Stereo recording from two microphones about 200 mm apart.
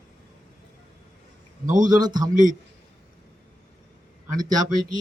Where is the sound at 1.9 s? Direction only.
20° right (ahead or behind).